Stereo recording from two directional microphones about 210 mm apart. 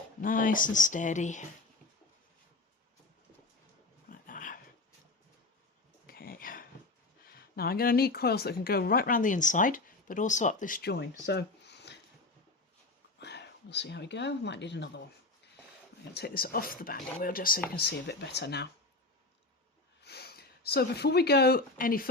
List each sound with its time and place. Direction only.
0.2 s speech: 40° left (ahead or behind)
4.1 s dog: 40° left (ahead or behind)
6.1 s a sound: 45° left (ahead or behind)
7.5 s speech: 45° left (ahead or behind)
11.3 s a sound: 55° left (ahead or behind)
13.1 s speech: 55° left (ahead or behind)
16.1 s speech: 50° left (ahead or behind)
20.0 s speech: 50° left (ahead or behind)